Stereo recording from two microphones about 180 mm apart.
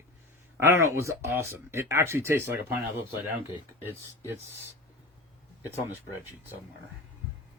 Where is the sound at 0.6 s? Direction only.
15° right (ahead or behind).